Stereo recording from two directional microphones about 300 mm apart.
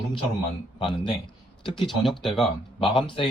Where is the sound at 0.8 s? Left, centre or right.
Centre.